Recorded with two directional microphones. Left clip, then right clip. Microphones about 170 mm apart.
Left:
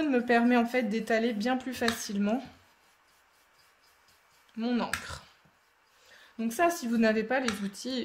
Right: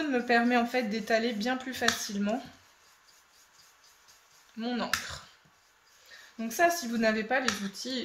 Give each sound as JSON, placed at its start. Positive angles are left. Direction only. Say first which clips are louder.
{"t": 0.0, "sound": "speech", "louder": "left 1 dB", "side_deg": 40}
{"t": 4.6, "sound": "speech", "louder": "even", "side_deg": 40}
{"t": 6.3, "sound": "speech", "louder": "right 1 dB", "side_deg": 45}